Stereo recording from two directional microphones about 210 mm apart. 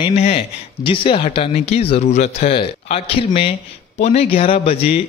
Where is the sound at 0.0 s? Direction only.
30° left (ahead or behind).